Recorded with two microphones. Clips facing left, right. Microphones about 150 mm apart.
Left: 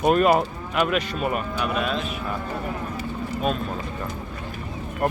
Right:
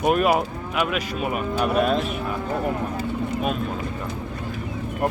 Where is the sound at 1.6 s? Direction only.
45° right (ahead or behind).